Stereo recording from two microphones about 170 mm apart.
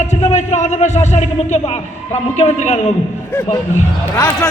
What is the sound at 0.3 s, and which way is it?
Speech, 40° left (ahead or behind).